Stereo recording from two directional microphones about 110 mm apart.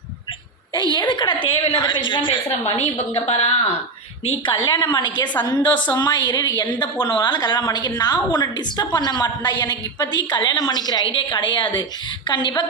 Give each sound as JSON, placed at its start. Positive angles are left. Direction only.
{"t": 0.7, "sound": "a woman's voice", "side_deg": 45}
{"t": 3.2, "sound": "a woman's voice", "side_deg": 75}
{"t": 4.4, "sound": "a woman's voice", "side_deg": 45}